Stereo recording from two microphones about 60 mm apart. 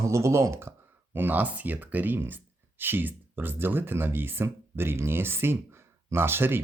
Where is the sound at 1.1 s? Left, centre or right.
Right.